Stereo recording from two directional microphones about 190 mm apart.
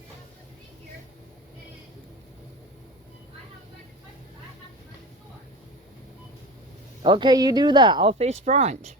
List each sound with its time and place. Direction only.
7.0 s speech: 25° right (ahead or behind)